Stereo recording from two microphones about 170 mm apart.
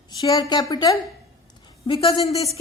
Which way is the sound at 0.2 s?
20° left (ahead or behind).